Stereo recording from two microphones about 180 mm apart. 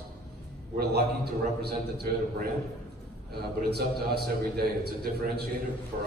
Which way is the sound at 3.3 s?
60° right (ahead or behind).